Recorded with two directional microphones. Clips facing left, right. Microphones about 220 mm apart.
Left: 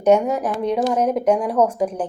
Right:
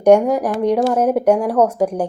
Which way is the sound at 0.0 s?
10° right (ahead or behind).